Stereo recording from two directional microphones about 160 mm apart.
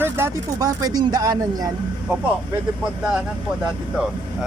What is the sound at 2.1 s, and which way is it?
Speech, 10° right (ahead or behind).